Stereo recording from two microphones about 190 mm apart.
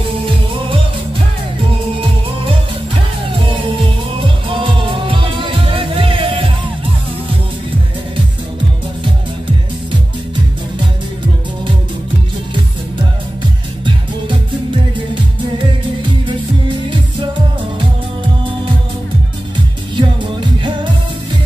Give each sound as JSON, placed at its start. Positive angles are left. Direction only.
{"t": 4.5, "sound": "music", "side_deg": -25}
{"t": 20.0, "sound": "music", "side_deg": -25}